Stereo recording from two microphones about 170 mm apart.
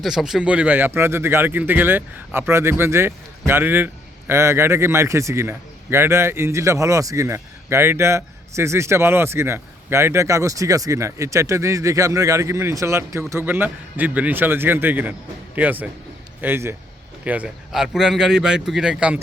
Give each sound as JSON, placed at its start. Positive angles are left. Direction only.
{"t": 0.0, "sound": "a man's voice", "side_deg": 0}